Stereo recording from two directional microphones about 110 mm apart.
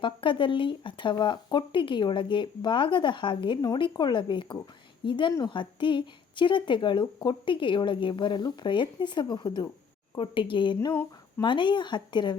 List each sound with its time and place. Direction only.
0.0 s a woman's voice: 50° left (ahead or behind)